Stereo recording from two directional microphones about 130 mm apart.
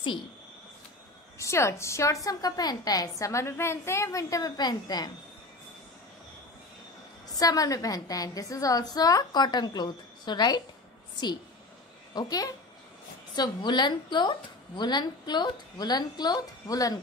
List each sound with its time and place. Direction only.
1.4 s a woman's voice: 20° left (ahead or behind)
7.2 s a woman's voice: 30° left (ahead or behind)
12.1 s a woman's voice: 30° left (ahead or behind)